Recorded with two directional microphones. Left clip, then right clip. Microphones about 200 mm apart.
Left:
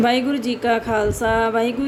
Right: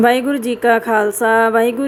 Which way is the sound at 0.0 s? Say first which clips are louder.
Right 5 dB; 20° right (ahead or behind).